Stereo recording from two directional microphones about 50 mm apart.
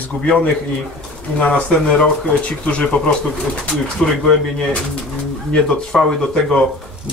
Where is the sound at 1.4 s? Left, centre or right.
Left.